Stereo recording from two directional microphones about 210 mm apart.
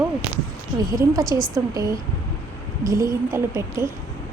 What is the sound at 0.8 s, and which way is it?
A woman's voice, 15° right (ahead or behind).